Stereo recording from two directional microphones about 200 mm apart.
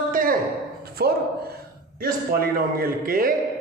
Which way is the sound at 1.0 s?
55° right (ahead or behind).